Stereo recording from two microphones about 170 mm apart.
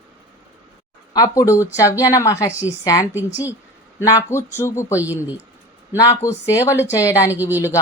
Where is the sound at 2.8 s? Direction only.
20° left (ahead or behind).